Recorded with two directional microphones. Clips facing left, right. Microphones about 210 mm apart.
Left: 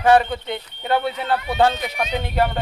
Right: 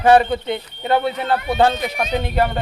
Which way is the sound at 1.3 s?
50° right (ahead or behind).